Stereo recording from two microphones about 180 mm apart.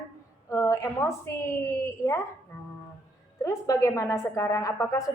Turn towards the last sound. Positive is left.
turn(degrees=20)  # may be behind; listen again after turning